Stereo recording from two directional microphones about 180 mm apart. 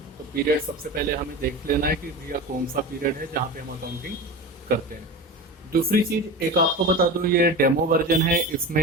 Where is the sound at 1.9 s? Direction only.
55° right (ahead or behind).